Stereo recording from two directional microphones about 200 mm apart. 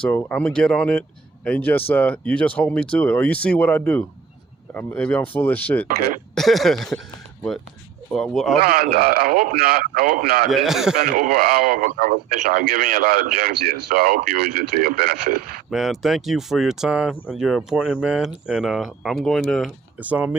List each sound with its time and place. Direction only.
0.0 s speech: 5° left (ahead or behind)
8.1 s speech: centre (ahead or behind)
8.5 s speech: 50° right (ahead or behind)
10.5 s speech: centre (ahead or behind)
11.0 s speech: 45° right (ahead or behind)
15.7 s speech: centre (ahead or behind)